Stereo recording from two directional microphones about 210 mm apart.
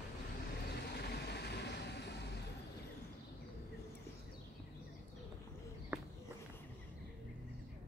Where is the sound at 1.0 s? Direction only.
50° left (ahead or behind).